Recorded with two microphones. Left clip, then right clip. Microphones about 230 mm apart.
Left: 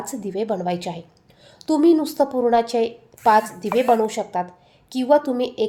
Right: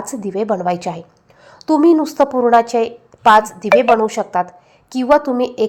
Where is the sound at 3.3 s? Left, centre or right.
Centre.